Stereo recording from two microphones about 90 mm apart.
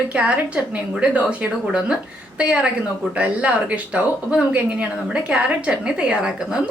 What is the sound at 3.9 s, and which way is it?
A woman's voice, 10° right (ahead or behind).